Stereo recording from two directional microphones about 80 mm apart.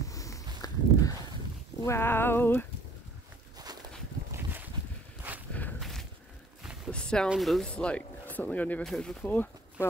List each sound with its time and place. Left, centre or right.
0.1 s walk: left
1.9 s a sound: left
4.3 s boat: right
5.5 s walk: left
5.8 s a sound: centre
7.3 s speech: centre
7.7 s speech: centre
8.8 s speech: centre
9.2 s speech: left